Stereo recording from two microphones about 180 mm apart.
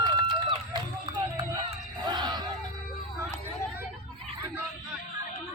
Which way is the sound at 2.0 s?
25° right (ahead or behind).